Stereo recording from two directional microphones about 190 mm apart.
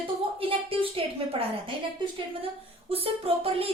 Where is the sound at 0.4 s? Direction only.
30° right (ahead or behind).